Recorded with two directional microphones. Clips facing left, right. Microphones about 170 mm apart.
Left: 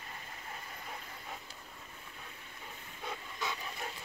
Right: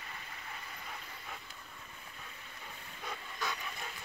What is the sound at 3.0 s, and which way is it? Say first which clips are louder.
Dog: left 1 dB; 25° left (ahead or behind).